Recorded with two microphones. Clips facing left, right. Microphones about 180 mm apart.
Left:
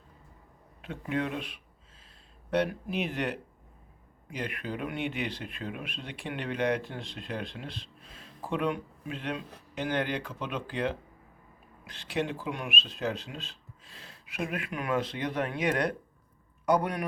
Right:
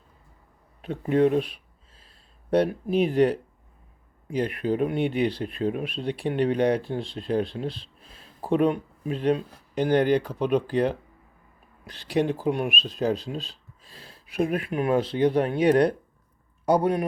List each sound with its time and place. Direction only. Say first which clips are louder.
0.8 s speech: right 11 dB; 40° right (ahead or behind)